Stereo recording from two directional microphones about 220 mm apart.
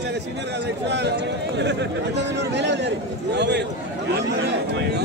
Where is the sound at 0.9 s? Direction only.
50° right (ahead or behind).